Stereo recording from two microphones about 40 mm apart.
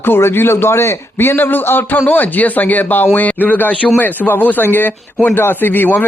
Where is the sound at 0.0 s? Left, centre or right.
Left.